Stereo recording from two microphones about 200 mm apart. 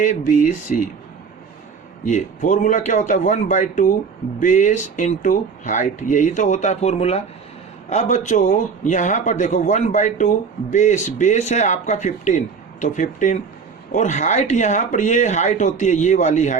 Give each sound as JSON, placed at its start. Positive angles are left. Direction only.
{"t": 0.0, "sound": "speech", "side_deg": 40}
{"t": 2.0, "sound": "speech", "side_deg": 40}